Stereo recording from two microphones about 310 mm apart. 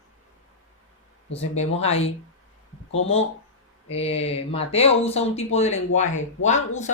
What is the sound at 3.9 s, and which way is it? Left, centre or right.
Speech, centre.